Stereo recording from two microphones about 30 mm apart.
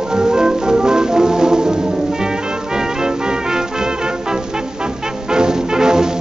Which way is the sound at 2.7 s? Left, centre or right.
Right.